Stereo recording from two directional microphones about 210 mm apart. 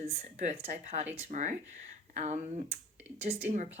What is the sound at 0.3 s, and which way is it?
Speech, 35° right (ahead or behind).